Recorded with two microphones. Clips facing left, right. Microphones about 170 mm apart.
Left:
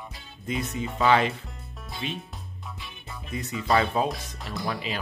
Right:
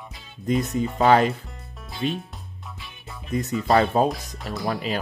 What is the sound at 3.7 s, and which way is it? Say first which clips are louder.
Speech: right 4 dB; 40° right (ahead or behind).